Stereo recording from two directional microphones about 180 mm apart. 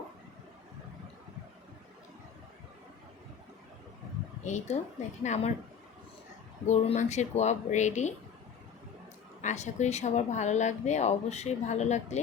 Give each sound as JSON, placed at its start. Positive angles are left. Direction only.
{"t": 4.4, "sound": "speech", "side_deg": 40}
{"t": 6.7, "sound": "speech", "side_deg": 40}
{"t": 9.4, "sound": "speech", "side_deg": 40}